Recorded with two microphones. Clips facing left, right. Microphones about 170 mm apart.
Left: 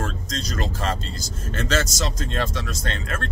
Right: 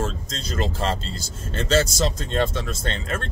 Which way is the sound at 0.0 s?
25° right (ahead or behind).